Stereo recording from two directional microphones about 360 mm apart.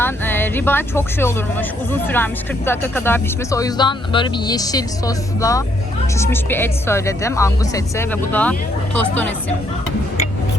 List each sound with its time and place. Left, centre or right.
0.0 s speech: centre